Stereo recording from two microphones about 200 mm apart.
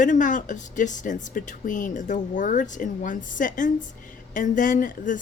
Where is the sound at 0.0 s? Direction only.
40° left (ahead or behind).